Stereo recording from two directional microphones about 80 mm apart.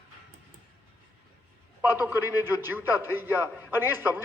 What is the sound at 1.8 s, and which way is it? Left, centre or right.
A man's voice, right.